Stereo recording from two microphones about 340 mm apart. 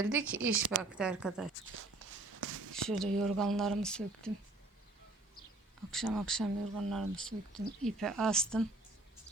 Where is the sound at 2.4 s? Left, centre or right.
Right.